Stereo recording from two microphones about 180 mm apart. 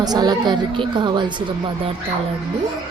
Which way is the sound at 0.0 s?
20° right (ahead or behind).